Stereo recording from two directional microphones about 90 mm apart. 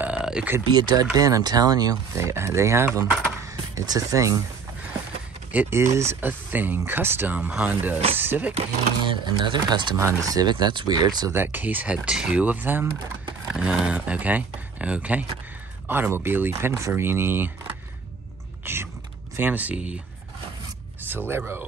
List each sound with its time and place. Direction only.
0.2 s a sound: 10° right (ahead or behind)
0.7 s speech: 55° right (ahead or behind)
2.1 s speech: 30° right (ahead or behind)
5.5 s speech: 20° right (ahead or behind)
5.8 s speech: 30° right (ahead or behind)
9.0 s speech: 60° right (ahead or behind)
9.9 s speech: 35° right (ahead or behind)
10.4 s speech: 55° right (ahead or behind)
11.3 s speech: 20° right (ahead or behind)
13.5 s speech: 10° right (ahead or behind)
21.1 s speech: 20° right (ahead or behind)